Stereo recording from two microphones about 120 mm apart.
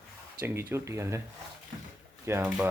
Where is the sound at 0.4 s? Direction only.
20° right (ahead or behind).